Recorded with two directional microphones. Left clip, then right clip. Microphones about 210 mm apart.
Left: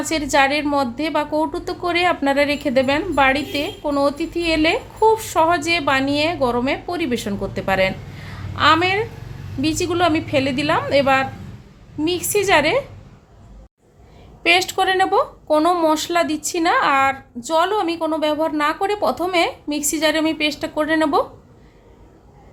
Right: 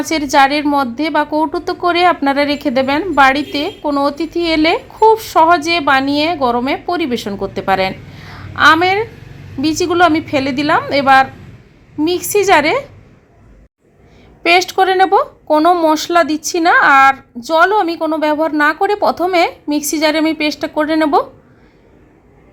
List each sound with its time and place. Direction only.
0.0 s a woman's voice: 15° right (ahead or behind)
14.4 s a woman's voice: 15° right (ahead or behind)